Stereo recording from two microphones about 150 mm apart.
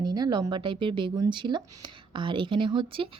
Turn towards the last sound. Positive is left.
turn(degrees=-35)  # may be behind; listen again after turning